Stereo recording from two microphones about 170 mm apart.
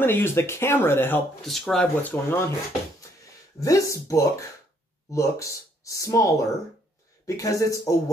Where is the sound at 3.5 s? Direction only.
20° left (ahead or behind).